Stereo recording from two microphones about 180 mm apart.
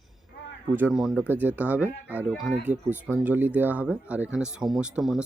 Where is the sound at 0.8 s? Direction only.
5° right (ahead or behind).